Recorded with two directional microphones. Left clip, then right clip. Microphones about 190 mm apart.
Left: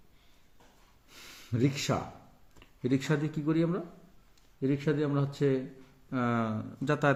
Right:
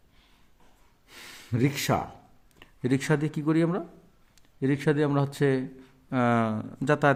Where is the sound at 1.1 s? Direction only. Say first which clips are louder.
Right 4 dB; 45° right (ahead or behind).